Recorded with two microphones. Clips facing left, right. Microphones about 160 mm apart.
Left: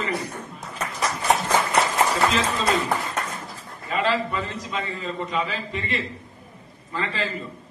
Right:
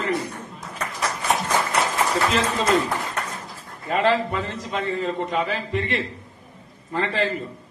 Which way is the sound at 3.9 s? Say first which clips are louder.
Right 3 dB; 65° right (ahead or behind).